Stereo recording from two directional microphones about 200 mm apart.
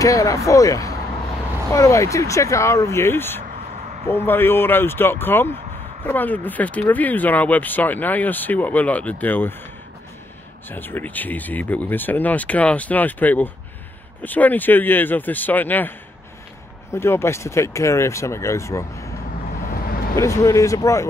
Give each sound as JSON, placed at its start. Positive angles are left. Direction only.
{"t": 0.0, "sound": "speech", "side_deg": 15}
{"t": 10.7, "sound": "speech", "side_deg": 10}
{"t": 16.9, "sound": "speech", "side_deg": 10}
{"t": 19.7, "sound": "vehicle", "side_deg": 50}
{"t": 20.2, "sound": "speech", "side_deg": 15}